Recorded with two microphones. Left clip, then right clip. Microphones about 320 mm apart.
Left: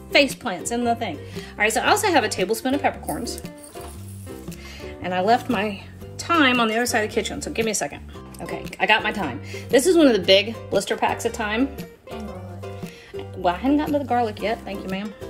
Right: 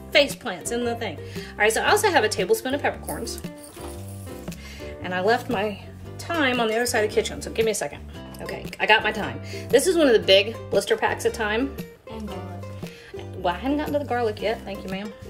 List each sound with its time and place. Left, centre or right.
0.1 s speech: centre
5.0 s speech: left
11.7 s music: centre
13.4 s speech: left